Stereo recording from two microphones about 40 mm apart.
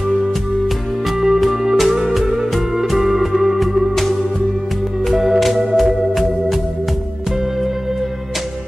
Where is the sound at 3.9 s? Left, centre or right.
Centre.